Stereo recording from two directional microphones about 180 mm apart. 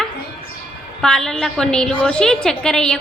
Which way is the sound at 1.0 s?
5° left (ahead or behind).